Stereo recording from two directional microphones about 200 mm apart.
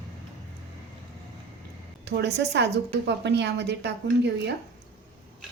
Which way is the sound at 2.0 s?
55° right (ahead or behind).